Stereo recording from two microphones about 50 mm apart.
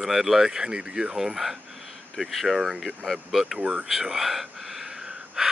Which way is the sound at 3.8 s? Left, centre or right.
Centre.